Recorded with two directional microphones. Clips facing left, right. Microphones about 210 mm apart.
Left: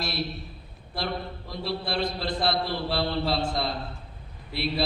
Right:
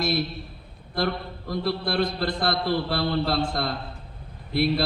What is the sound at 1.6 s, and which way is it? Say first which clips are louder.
Mantra: right 4 dB; 55° right (ahead or behind).